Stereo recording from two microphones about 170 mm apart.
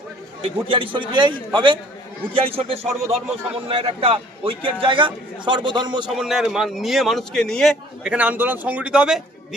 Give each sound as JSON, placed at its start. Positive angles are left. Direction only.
{"t": 0.7, "sound": "a man's voice", "side_deg": -30}
{"t": 6.1, "sound": "a man's voice", "side_deg": 0}